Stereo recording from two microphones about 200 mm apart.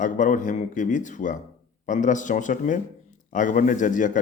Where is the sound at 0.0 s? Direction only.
40° left (ahead or behind).